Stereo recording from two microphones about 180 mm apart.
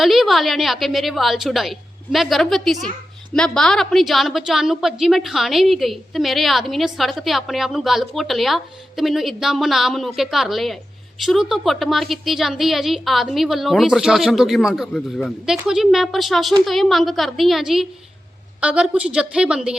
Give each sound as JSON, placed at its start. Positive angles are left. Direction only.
{"t": 0.0, "sound": "a woman's voice", "side_deg": 0}